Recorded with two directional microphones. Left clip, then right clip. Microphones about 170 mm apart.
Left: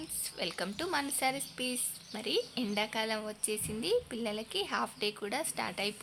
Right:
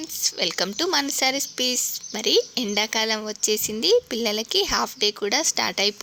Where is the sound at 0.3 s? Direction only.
40° right (ahead or behind).